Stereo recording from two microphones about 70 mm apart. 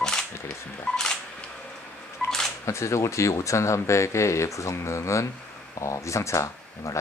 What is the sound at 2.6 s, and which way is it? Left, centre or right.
Speech, left.